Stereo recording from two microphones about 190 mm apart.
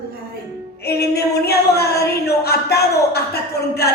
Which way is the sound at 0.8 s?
55° left (ahead or behind).